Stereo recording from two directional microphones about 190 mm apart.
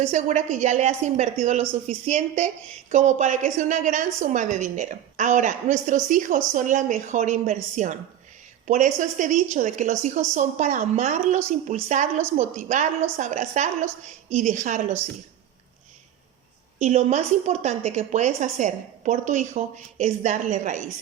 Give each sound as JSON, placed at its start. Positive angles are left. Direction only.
{"t": 0.0, "sound": "a woman's voice", "side_deg": -40}
{"t": 16.8, "sound": "a woman's voice", "side_deg": -35}